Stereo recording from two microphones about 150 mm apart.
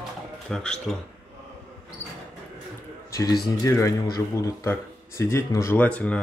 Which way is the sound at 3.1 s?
20° left (ahead or behind).